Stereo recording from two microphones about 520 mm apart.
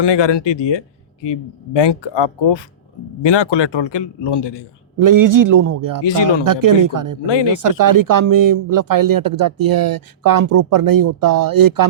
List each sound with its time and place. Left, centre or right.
0.0 s a man's voice: left
4.9 s speech: right
6.1 s a man's voice: left
6.4 s speech: right
7.3 s a man's voice: left
7.5 s speech: right